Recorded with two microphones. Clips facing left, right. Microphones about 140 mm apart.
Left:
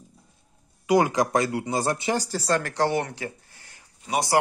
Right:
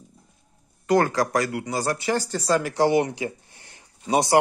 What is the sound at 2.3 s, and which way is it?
Speech, centre (ahead or behind).